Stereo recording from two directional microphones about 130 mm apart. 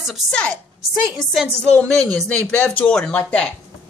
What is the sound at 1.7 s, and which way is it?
A woman's voice, 10° left (ahead or behind).